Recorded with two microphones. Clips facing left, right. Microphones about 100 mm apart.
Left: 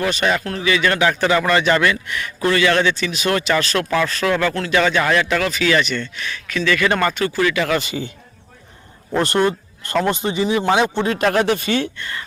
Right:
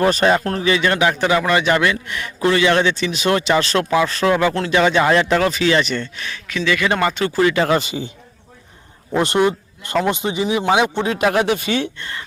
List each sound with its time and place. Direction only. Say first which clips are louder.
0.0 s a man's voice: right 4 dB; 35° right (ahead or behind)
0.9 s a man's voice: left 1 dB; 20° right (ahead or behind)
6.5 s a man's voice: left 1 dB; 20° right (ahead or behind)
9.2 s speech: right 1 dB; 20° right (ahead or behind)
11.9 s a man's voice: left 1 dB; 30° right (ahead or behind)